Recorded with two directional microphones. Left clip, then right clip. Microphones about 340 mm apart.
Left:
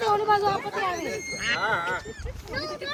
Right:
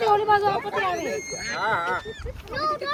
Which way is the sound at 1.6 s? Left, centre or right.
Centre.